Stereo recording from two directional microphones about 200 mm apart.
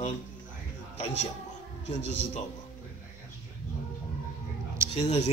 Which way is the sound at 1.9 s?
60° left (ahead or behind).